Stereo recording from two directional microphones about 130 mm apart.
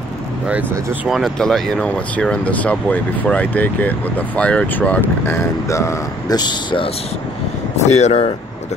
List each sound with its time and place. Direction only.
0.5 s speech: 5° right (ahead or behind); by 6.9 s 35° left (ahead or behind)
7.8 s speech: 60° left (ahead or behind)